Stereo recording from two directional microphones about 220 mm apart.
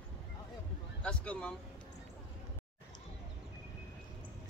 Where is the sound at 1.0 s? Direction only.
5° left (ahead or behind).